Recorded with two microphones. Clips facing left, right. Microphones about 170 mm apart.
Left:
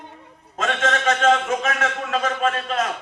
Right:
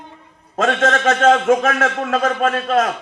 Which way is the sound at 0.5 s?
45° right (ahead or behind).